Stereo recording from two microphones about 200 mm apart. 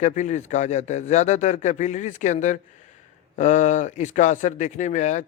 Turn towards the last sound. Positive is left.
turn(degrees=35)  # may be behind; listen again after turning